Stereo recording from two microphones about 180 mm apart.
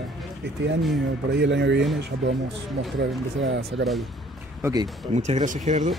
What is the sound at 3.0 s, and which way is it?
Speech, 75° right (ahead or behind).